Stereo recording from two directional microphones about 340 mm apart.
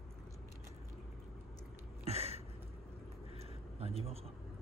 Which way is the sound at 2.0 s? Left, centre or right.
Centre.